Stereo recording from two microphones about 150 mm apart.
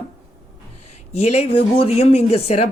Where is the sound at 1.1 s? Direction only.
45° left (ahead or behind).